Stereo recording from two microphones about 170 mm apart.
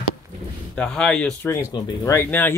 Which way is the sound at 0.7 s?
5° left (ahead or behind).